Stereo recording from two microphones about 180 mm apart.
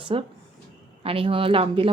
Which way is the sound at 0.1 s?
30° right (ahead or behind).